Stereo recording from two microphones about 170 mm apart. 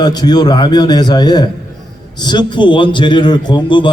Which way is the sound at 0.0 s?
25° left (ahead or behind).